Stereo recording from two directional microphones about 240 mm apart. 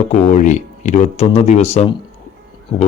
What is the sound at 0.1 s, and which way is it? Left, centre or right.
Speech, left.